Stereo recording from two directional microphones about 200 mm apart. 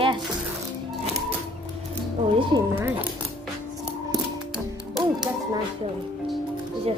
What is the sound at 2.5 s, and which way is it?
Speech, 20° right (ahead or behind).